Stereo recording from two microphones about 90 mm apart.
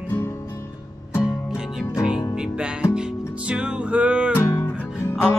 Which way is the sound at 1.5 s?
5° right (ahead or behind).